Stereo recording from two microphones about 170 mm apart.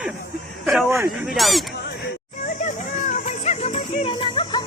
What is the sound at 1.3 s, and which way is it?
Speech, centre (ahead or behind).